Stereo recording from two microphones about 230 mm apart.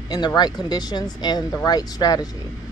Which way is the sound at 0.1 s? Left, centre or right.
Centre.